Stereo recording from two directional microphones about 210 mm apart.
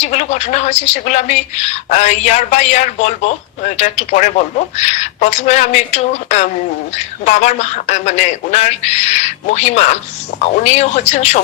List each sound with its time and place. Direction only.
0.0 s a woman's voice: 30° left (ahead or behind)